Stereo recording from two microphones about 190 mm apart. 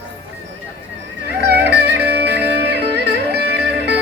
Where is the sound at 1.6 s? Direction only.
60° right (ahead or behind).